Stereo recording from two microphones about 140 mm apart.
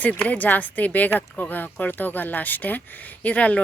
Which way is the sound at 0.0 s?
10° left (ahead or behind).